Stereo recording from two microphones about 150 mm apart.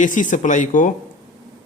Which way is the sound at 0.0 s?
60° left (ahead or behind).